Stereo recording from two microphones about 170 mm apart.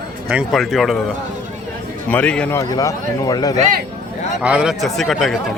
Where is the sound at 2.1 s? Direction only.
10° left (ahead or behind).